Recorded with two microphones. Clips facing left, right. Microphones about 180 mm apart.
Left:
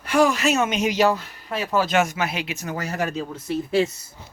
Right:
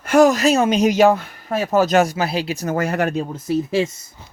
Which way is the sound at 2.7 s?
60° right (ahead or behind).